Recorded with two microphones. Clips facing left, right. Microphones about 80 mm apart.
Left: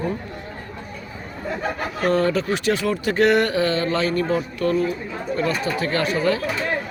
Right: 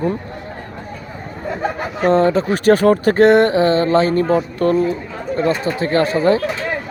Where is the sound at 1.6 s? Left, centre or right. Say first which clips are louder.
Right 5 dB; right.